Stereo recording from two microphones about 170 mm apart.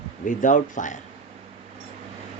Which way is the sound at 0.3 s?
50° left (ahead or behind).